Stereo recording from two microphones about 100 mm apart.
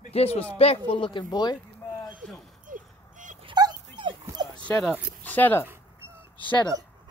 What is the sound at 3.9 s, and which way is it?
Dog, 55° right (ahead or behind).